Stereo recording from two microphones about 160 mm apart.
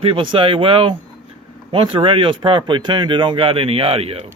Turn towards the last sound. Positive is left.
turn(degrees=-35)  # may be behind; listen again after turning